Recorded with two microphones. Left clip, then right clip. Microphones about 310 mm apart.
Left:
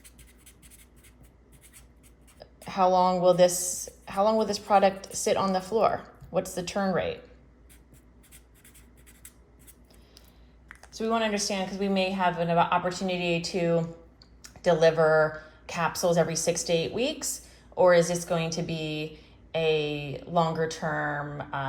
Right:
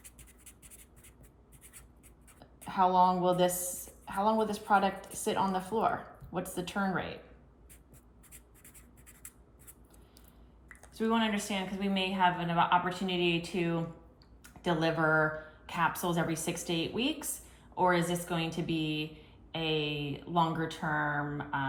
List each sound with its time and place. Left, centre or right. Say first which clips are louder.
2.6 s a woman's voice: left 3 dB; left
10.9 s a woman's voice: left 4 dB; centre
19.5 s speech: left 7 dB; centre